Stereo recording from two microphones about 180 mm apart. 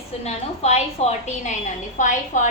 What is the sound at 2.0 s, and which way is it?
Speech, 45° left (ahead or behind).